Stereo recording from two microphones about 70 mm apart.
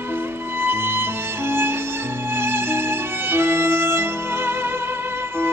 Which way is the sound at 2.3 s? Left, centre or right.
Right.